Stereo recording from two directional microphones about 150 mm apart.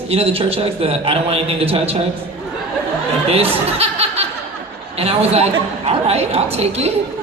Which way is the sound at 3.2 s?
40° right (ahead or behind).